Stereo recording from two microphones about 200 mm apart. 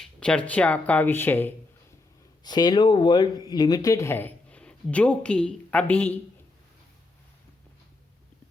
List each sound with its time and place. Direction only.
0.0 s speech: 5° left (ahead or behind)